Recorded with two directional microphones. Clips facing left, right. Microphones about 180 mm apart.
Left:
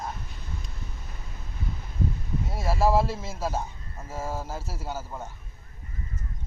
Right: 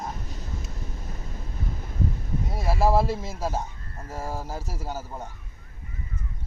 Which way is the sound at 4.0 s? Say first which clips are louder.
Even; 10° left (ahead or behind).